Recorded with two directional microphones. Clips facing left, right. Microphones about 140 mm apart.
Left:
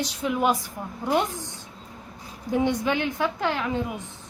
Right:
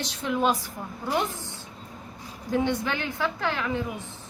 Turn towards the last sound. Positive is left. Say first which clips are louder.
# left 2 dB
turn(degrees=20)  # may be behind; listen again after turning